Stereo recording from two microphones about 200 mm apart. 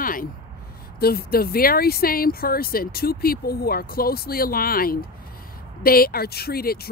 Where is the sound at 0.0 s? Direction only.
45° left (ahead or behind).